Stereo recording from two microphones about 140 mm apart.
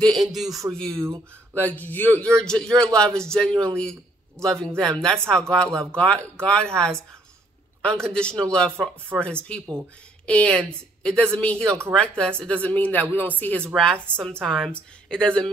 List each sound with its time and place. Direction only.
0.0 s speech: centre (ahead or behind)
0.9 s speech: 20° right (ahead or behind)
1.5 s a woman's voice: 10° left (ahead or behind)